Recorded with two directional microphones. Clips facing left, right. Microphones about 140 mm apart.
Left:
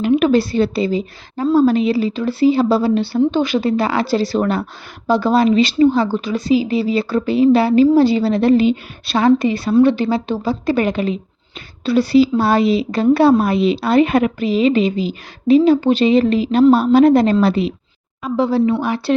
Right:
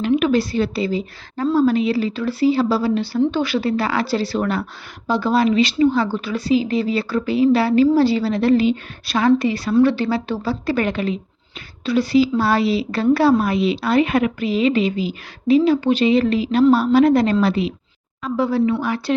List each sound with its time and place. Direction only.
0.2 s a woman's voice: 30° left (ahead or behind)
1.5 s a woman's voice: 30° left (ahead or behind)
1.9 s a woman's voice: 15° left (ahead or behind)
11.9 s a woman's voice: 30° left (ahead or behind)